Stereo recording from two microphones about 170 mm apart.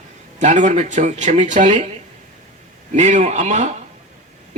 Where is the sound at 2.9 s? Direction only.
45° right (ahead or behind).